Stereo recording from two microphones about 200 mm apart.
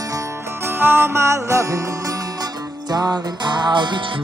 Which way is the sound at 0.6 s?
10° right (ahead or behind).